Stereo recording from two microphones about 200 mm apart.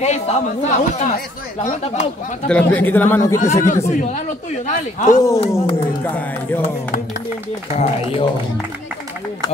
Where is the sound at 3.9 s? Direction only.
35° left (ahead or behind).